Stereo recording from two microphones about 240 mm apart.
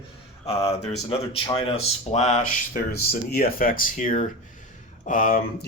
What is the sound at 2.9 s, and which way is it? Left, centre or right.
Speech, left.